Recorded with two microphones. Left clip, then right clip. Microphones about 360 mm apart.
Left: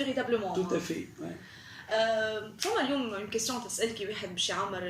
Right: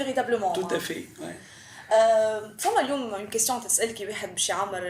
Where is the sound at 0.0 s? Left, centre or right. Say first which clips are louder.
Right 5 dB; centre.